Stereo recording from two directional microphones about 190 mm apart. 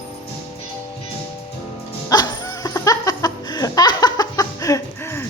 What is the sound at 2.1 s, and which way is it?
Laughter, 20° left (ahead or behind).